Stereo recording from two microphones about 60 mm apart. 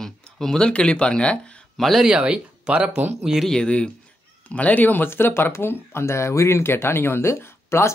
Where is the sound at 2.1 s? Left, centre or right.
Centre.